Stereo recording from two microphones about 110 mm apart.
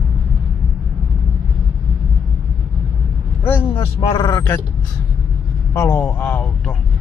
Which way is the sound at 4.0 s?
40° left (ahead or behind).